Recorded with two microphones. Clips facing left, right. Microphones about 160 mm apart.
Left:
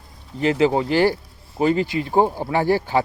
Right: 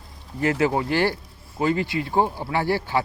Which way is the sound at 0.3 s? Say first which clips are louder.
Left 3 dB; 20° left (ahead or behind).